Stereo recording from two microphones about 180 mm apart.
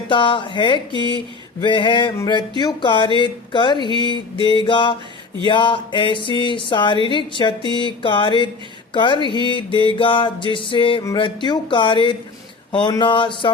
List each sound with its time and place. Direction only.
0.1 s music: 25° left (ahead or behind)